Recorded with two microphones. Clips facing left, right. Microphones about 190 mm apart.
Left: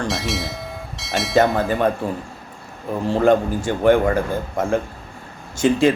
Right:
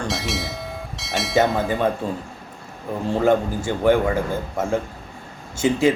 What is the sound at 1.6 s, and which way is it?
Speech, 20° right (ahead or behind).